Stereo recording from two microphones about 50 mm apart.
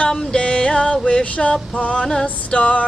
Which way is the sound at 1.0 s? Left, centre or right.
Centre.